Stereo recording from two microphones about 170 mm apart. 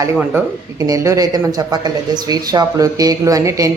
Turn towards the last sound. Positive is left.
turn(degrees=-20)  # may be behind; listen again after turning